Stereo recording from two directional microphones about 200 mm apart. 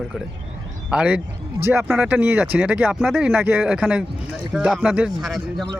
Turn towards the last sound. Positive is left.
turn(degrees=0)  # may be behind; listen again after turning